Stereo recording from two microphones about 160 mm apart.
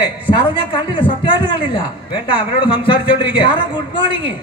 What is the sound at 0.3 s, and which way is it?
A man's voice, 30° left (ahead or behind).